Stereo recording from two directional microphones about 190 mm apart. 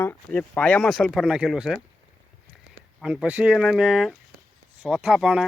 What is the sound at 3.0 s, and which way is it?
Speech, centre (ahead or behind).